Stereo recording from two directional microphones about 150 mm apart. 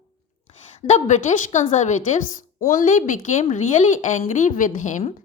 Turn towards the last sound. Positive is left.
turn(degrees=55)  # may be behind; listen again after turning